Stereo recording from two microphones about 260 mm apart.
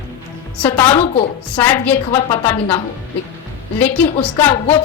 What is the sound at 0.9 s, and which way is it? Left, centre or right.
Speech, left.